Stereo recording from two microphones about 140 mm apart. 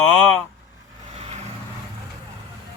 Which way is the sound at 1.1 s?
50° right (ahead or behind).